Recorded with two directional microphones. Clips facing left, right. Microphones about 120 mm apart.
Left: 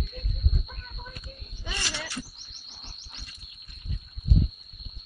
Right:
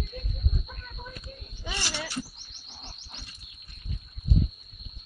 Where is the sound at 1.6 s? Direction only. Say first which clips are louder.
Right 1 dB; 25° right (ahead or behind).